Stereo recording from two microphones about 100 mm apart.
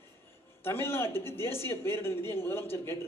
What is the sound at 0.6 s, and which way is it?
A man's voice, 25° left (ahead or behind).